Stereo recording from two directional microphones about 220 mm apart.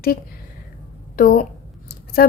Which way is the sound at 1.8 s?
45° left (ahead or behind).